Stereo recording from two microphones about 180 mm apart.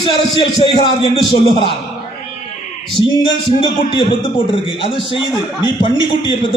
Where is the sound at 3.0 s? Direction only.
25° left (ahead or behind).